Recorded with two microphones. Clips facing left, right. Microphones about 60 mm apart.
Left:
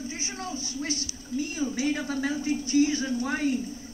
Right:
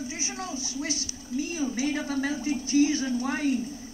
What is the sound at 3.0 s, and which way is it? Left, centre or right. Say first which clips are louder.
Speech: even; centre.